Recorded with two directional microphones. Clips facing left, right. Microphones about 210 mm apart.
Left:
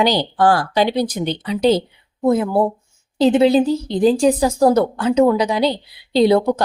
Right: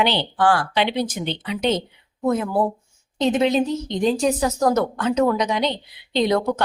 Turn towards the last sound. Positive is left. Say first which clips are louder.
# left 6 dB
turn(degrees=30)  # may be behind; listen again after turning